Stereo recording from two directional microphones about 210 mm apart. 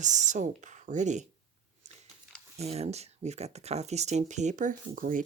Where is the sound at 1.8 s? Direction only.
35° right (ahead or behind).